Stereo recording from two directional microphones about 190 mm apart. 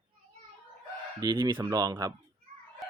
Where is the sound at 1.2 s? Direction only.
25° right (ahead or behind).